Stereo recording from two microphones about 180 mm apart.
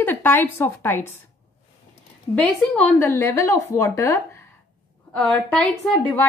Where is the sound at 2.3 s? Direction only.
5° left (ahead or behind).